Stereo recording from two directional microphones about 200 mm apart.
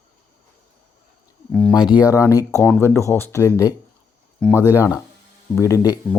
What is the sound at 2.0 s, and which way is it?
Speech, 15° left (ahead or behind).